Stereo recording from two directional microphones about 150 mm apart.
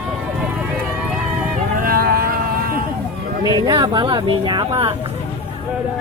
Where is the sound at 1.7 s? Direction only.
75° right (ahead or behind).